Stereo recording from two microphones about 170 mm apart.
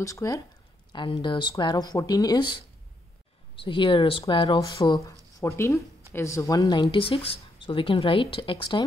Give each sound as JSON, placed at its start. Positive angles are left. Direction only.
{"t": 0.0, "sound": "speech", "side_deg": 20}